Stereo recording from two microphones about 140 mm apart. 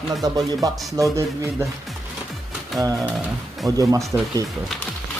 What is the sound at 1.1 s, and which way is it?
Speech, 20° right (ahead or behind).